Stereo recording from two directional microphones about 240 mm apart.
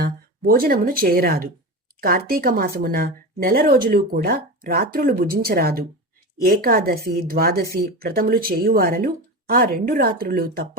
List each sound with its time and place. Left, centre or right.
0.0 s a woman's voice: right